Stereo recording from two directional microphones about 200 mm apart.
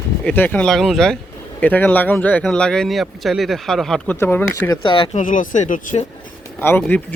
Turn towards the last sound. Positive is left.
turn(degrees=10)  # may be behind; listen again after turning